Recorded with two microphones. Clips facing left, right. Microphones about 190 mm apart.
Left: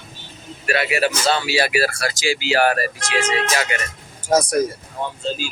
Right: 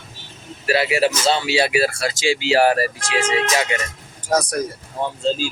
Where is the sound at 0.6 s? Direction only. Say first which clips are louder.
Right 2 dB; 30° right (ahead or behind).